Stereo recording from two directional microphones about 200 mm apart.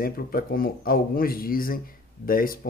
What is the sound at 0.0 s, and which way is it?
Speech, 45° left (ahead or behind).